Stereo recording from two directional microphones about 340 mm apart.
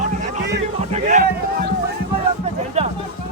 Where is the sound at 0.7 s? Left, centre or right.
Centre.